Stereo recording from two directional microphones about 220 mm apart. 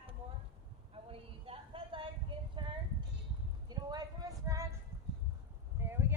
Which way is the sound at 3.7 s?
20° right (ahead or behind).